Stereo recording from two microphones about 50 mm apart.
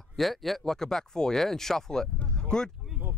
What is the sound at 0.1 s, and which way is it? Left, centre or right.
Speech, centre.